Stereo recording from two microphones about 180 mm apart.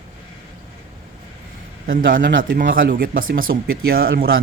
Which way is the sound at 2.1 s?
50° right (ahead or behind).